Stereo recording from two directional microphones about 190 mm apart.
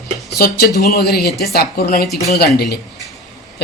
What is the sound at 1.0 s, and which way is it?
Speech, 55° left (ahead or behind).